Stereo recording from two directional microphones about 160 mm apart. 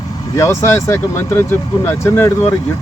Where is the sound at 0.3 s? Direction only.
15° left (ahead or behind).